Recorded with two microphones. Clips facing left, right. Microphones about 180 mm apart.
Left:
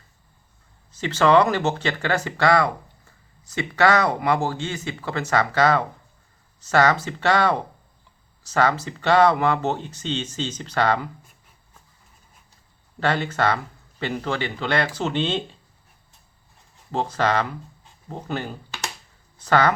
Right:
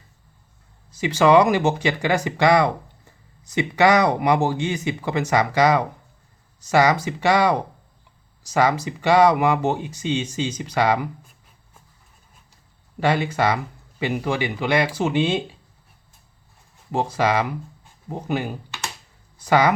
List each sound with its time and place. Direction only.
0.9 s speech: 10° right (ahead or behind)
13.0 s speech: 10° right (ahead or behind)
16.9 s speech: 10° right (ahead or behind)